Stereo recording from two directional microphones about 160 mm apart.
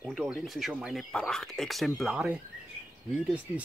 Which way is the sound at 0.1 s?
5° right (ahead or behind).